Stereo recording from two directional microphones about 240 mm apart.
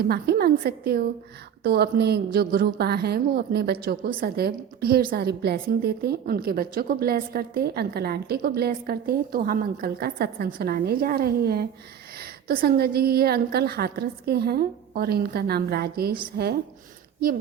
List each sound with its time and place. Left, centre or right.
0.0 s a woman's voice: right